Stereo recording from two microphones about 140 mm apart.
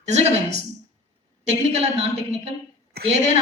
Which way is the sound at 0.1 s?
50° right (ahead or behind).